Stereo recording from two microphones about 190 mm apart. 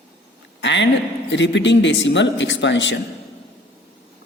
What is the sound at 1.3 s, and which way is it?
A man's voice, 70° left (ahead or behind).